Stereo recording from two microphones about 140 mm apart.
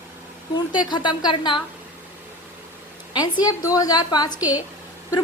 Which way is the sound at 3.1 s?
30° left (ahead or behind).